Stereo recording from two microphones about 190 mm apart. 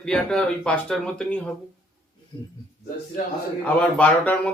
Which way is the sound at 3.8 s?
5° left (ahead or behind).